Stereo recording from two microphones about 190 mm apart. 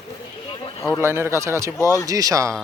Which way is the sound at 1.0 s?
15° right (ahead or behind).